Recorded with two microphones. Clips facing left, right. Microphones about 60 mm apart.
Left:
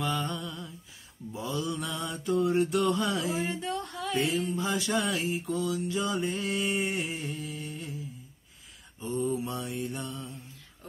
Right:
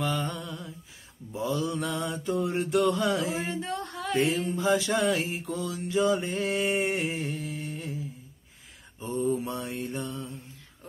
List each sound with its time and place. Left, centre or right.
0.0 s a sound: right
1.3 s mantra: right
9.0 s mantra: right